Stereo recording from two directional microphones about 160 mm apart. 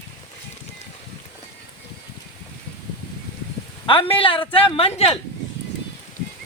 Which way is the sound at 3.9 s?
35° left (ahead or behind).